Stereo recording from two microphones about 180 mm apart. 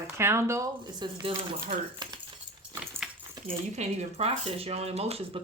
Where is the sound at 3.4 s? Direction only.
40° right (ahead or behind).